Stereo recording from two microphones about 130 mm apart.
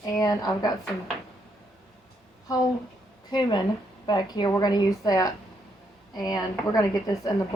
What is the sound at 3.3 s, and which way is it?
A woman's voice, 35° left (ahead or behind).